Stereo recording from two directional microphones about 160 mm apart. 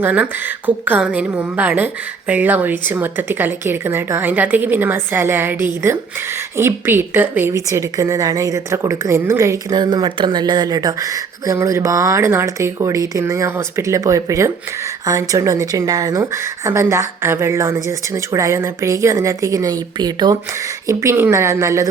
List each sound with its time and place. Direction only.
0.0 s a woman's voice: 10° right (ahead or behind)